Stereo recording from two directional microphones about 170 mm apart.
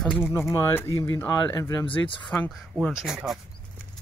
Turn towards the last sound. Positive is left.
turn(degrees=-5)  # may be behind; listen again after turning